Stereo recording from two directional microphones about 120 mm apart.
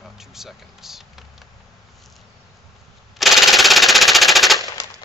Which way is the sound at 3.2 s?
Centre (ahead or behind).